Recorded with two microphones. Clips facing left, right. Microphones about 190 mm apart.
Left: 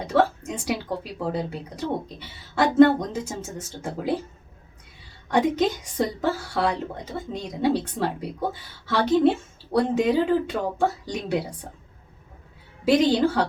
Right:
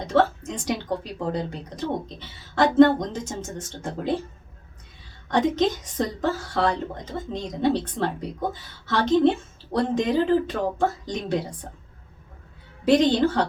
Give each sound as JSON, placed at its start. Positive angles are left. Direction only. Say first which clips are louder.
{"t": 0.0, "sound": "a woman's voice", "louder": "even", "side_deg": 10}
{"t": 5.3, "sound": "a woman's voice", "louder": "even", "side_deg": 10}
{"t": 12.8, "sound": "a woman's voice", "louder": "even", "side_deg": 10}